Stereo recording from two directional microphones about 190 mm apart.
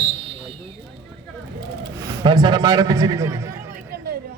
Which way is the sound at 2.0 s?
20° right (ahead or behind).